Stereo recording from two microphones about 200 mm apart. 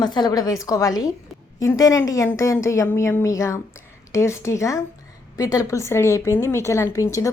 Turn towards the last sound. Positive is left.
turn(degrees=15)  # may be behind; listen again after turning